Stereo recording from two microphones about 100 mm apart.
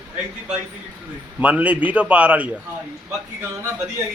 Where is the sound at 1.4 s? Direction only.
15° right (ahead or behind).